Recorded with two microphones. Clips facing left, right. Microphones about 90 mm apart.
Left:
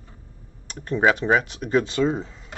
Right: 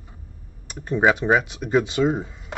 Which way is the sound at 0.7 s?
10° right (ahead or behind).